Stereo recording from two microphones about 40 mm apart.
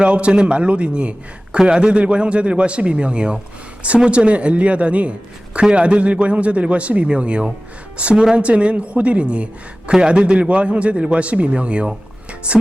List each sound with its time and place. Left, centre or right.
0.0 s a man's voice: right
8.1 s a woman's voice: centre
8.4 s a man's voice: right